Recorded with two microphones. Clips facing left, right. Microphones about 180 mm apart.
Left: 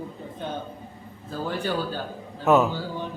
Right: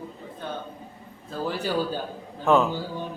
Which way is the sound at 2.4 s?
5° left (ahead or behind).